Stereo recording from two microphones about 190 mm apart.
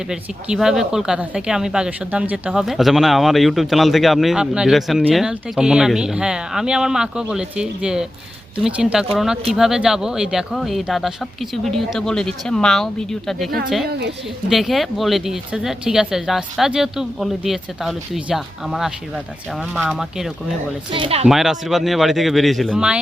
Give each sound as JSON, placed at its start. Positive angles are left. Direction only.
{"t": 0.1, "sound": "speech", "side_deg": -5}
{"t": 20.9, "sound": "speech", "side_deg": -30}
{"t": 21.2, "sound": "speech", "side_deg": 0}